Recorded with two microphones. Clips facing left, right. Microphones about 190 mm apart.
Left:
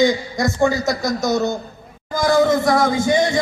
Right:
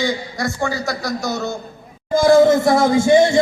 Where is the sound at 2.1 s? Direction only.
25° right (ahead or behind).